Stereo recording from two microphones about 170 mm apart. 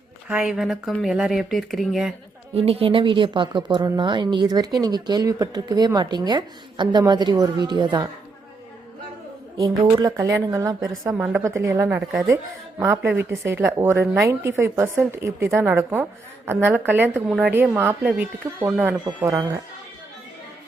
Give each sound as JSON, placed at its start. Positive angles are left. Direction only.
{"t": 0.3, "sound": "speech", "side_deg": -5}
{"t": 2.6, "sound": "speech", "side_deg": -35}
{"t": 9.6, "sound": "speech", "side_deg": -25}
{"t": 19.0, "sound": "speech", "side_deg": -20}